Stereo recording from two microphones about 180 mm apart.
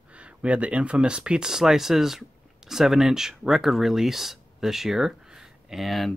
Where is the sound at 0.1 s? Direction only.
5° right (ahead or behind).